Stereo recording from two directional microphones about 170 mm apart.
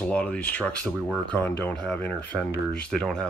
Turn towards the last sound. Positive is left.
turn(degrees=5)  # may be behind; listen again after turning